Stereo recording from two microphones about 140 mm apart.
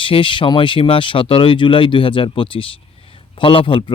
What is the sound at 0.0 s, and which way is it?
Speech, 40° left (ahead or behind).